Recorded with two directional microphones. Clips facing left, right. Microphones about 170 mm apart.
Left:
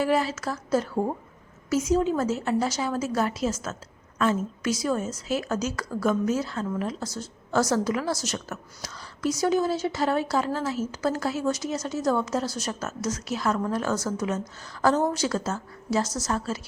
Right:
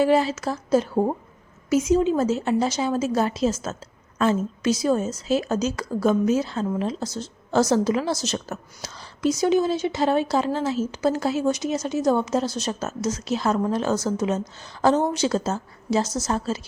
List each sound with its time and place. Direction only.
0.0 s a woman's voice: 25° right (ahead or behind)